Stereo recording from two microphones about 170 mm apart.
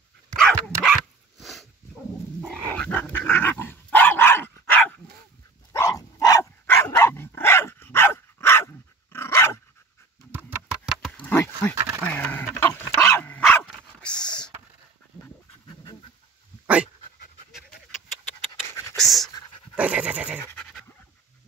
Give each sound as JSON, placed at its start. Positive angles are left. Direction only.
{"t": 1.4, "sound": "dog", "side_deg": 0}
{"t": 10.3, "sound": "a sound", "side_deg": -10}
{"t": 10.9, "sound": "wild animals", "side_deg": 5}
{"t": 11.7, "sound": "a sound", "side_deg": -20}
{"t": 12.1, "sound": "dog", "side_deg": 10}
{"t": 15.7, "sound": "pant", "side_deg": 25}
{"t": 16.6, "sound": "pant", "side_deg": -5}
{"t": 18.9, "sound": "a sound", "side_deg": 0}
{"t": 19.7, "sound": "pant", "side_deg": -5}
{"t": 20.3, "sound": "pant", "side_deg": 5}